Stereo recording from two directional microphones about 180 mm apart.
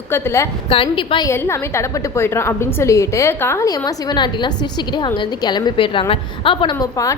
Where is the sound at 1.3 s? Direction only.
15° left (ahead or behind).